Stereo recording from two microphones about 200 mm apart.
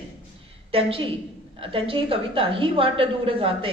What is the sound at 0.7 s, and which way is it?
A woman's voice, 30° right (ahead or behind).